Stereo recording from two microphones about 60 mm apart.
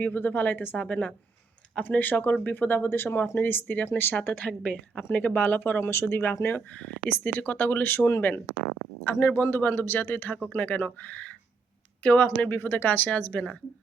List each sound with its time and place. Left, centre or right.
0.0 s speech: left
4.4 s speech: centre
5.0 s speech: left
6.7 s speech: left